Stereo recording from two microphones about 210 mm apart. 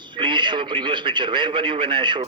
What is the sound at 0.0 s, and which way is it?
Speech, 20° right (ahead or behind).